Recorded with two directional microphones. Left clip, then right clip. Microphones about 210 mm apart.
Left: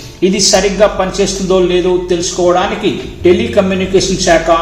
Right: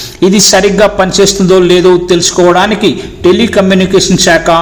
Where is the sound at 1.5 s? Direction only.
50° right (ahead or behind).